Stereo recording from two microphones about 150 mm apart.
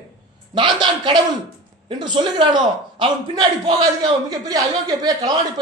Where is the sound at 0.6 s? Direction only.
30° right (ahead or behind).